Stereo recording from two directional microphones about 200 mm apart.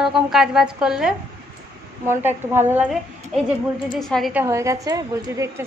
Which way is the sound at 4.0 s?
Centre (ahead or behind).